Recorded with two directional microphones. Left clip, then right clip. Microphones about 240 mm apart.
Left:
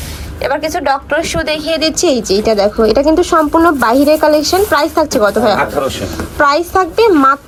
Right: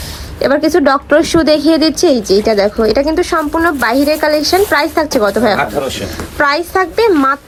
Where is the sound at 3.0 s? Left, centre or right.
Centre.